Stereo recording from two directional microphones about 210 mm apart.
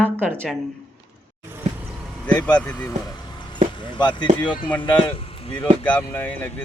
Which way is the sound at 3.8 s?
20° left (ahead or behind).